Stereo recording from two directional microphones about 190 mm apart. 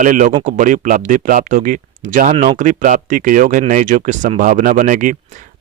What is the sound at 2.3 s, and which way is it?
Speech, 30° right (ahead or behind).